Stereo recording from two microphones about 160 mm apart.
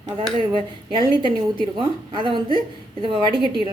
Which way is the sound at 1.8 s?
30° right (ahead or behind).